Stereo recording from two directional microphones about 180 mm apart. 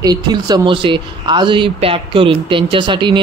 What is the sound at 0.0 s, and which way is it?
Speech, 20° right (ahead or behind).